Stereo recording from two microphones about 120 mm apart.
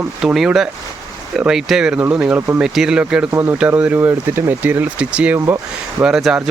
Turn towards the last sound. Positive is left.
turn(degrees=-5)  # may be behind; listen again after turning